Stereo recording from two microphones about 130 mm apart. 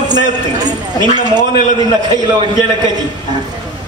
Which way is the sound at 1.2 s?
30° right (ahead or behind).